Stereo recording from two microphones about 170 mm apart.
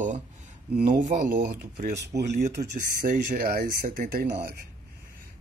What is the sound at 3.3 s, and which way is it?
Speech, 60° right (ahead or behind).